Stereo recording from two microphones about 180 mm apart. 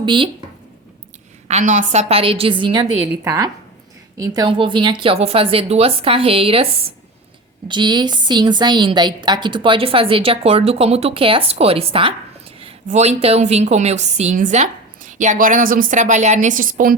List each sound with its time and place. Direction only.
0.0 s speech: 25° right (ahead or behind)
1.5 s a woman's voice: 40° right (ahead or behind)
3.1 s a woman's voice: 15° right (ahead or behind); by 16.9 s 50° right (ahead or behind)